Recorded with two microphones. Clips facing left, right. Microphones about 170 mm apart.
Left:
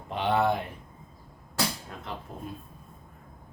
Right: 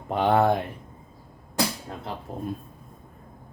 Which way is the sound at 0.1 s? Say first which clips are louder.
Right 5 dB; 45° right (ahead or behind).